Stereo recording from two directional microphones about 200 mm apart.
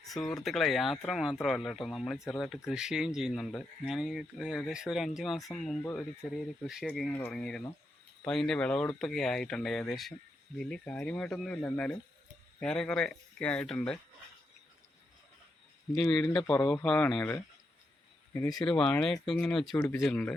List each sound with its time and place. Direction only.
0.0 s speech: centre (ahead or behind)
16.0 s speech: 5° left (ahead or behind)
18.3 s speech: 20° left (ahead or behind)
18.6 s speech: 5° left (ahead or behind)